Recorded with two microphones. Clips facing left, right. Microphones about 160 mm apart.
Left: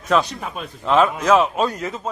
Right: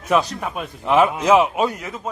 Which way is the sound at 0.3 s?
5° right (ahead or behind).